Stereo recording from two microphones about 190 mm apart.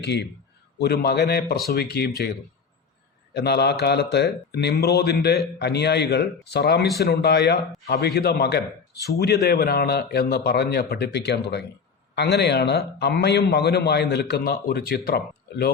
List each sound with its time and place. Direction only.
0.0 s a man's voice: 60° left (ahead or behind)
3.3 s a man's voice: 60° left (ahead or behind)